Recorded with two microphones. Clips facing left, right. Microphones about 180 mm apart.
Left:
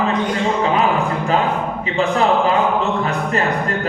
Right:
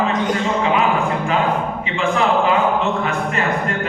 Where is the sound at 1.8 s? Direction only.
35° left (ahead or behind).